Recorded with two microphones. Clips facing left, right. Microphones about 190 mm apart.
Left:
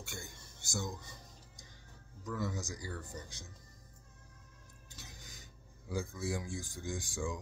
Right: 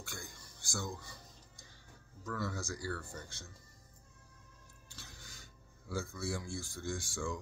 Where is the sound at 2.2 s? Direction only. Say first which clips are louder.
Left 1 dB; 15° left (ahead or behind).